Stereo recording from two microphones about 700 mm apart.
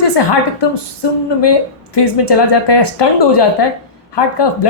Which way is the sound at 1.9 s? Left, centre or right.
Left.